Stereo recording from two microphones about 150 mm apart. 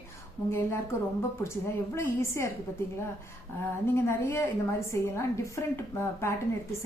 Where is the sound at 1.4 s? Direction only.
15° left (ahead or behind).